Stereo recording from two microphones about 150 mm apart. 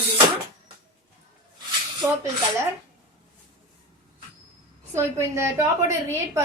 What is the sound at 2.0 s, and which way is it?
Speech, 20° right (ahead or behind).